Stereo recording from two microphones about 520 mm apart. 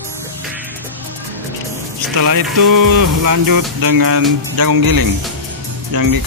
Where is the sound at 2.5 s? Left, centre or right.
Right.